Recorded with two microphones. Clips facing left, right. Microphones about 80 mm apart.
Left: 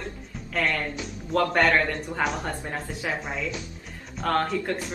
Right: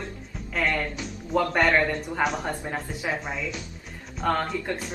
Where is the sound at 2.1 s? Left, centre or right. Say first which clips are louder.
Right 1 dB; centre.